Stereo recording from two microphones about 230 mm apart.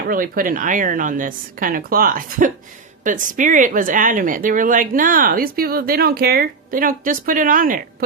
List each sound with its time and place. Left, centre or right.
0.1 s speech: right